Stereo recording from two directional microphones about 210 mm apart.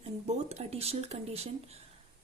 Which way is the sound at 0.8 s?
30° right (ahead or behind).